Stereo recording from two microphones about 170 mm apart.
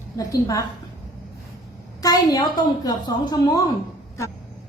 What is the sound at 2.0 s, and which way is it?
A woman's voice, 20° left (ahead or behind).